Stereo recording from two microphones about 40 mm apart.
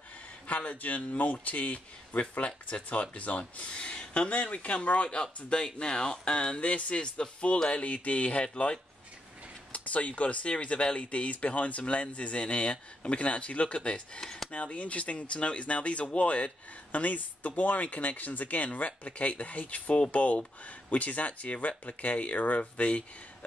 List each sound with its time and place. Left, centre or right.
0.5 s speech: left